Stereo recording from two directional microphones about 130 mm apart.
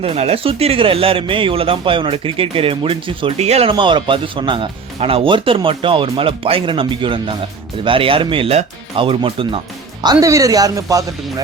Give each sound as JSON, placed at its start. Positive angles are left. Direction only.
{"t": 0.0, "sound": "speech", "side_deg": -50}
{"t": 10.0, "sound": "speech", "side_deg": -30}